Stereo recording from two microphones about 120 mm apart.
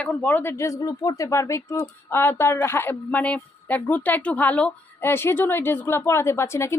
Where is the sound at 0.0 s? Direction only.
10° left (ahead or behind).